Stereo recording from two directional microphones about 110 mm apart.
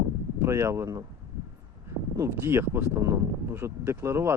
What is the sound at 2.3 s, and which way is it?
Speech, 20° right (ahead or behind).